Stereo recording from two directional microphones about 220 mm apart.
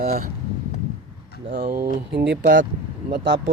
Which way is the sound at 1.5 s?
45° right (ahead or behind).